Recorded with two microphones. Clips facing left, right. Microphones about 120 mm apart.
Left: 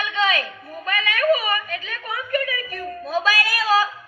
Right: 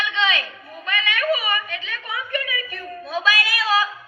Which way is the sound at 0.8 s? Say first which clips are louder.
Left 3 dB; 45° left (ahead or behind).